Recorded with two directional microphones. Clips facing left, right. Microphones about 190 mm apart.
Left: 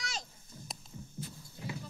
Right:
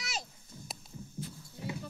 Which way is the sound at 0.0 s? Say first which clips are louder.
Right 1 dB; 5° right (ahead or behind).